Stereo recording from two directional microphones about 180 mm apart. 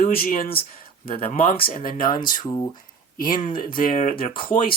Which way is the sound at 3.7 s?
50° left (ahead or behind).